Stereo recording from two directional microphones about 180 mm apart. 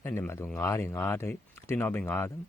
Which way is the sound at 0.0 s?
10° left (ahead or behind).